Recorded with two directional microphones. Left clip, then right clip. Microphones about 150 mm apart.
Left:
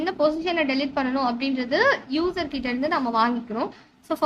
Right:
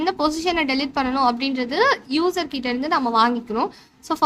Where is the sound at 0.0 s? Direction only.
30° right (ahead or behind).